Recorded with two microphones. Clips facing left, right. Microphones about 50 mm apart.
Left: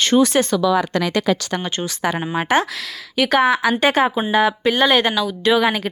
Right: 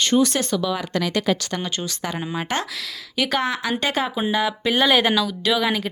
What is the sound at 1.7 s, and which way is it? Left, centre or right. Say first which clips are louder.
Speech: left 3 dB; left.